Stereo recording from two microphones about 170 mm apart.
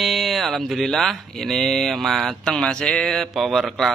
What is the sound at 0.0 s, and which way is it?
Speech, centre (ahead or behind).